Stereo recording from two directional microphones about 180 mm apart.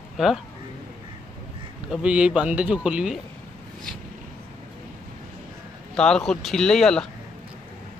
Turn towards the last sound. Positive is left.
turn(degrees=5)  # may be behind; listen again after turning